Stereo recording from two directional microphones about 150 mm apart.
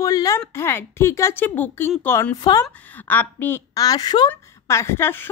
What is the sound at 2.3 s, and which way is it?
Speech, 25° left (ahead or behind).